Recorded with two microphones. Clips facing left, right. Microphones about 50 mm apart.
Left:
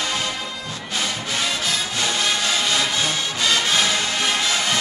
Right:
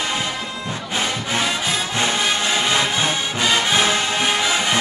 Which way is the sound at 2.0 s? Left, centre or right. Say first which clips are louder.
Right 2 dB; right.